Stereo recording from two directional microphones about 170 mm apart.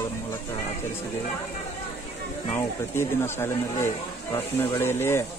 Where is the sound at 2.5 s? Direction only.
15° left (ahead or behind).